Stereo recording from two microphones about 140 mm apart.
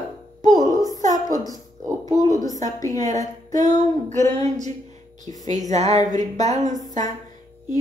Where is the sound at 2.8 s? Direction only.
25° left (ahead or behind).